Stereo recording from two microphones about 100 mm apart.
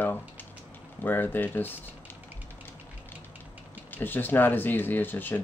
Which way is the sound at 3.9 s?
20° left (ahead or behind).